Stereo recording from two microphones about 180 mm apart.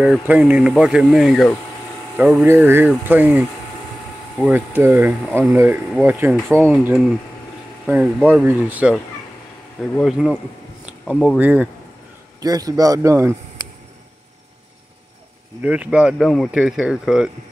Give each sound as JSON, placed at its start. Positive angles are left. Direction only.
{"t": 0.0, "sound": "speech", "side_deg": -5}
{"t": 12.4, "sound": "speech", "side_deg": -20}
{"t": 15.6, "sound": "speech", "side_deg": -5}